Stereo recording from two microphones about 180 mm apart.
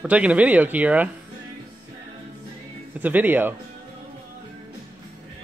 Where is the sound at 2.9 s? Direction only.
10° right (ahead or behind).